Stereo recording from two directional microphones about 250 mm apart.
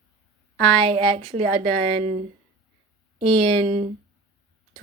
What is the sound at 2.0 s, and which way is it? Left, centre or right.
Speech, right.